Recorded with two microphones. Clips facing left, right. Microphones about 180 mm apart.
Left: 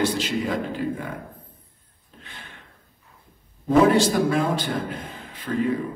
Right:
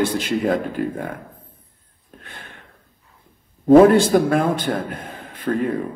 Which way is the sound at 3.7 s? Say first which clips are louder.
Right 7 dB; 55° right (ahead or behind).